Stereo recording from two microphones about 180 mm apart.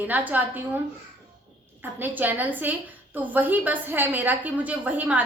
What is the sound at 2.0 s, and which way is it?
A woman's voice, 10° right (ahead or behind).